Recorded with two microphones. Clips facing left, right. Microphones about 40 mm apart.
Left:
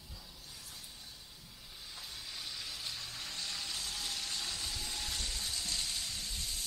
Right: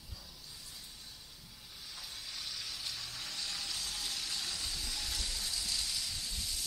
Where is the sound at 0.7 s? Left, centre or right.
Centre.